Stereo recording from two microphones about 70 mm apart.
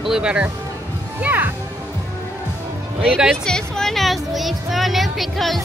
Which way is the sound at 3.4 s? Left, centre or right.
Centre.